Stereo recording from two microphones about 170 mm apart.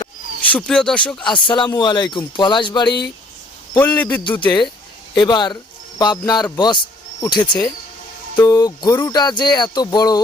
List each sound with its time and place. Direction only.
0.5 s speech: 5° left (ahead or behind)
1.3 s speech: 25° left (ahead or behind)
3.8 s a man's voice: 10° left (ahead or behind)
5.1 s speech: 25° left (ahead or behind)